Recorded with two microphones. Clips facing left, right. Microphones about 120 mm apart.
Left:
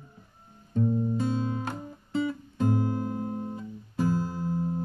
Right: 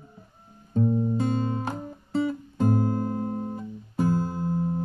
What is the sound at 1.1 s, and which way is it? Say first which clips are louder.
Music: right 2 dB; 55° right (ahead or behind).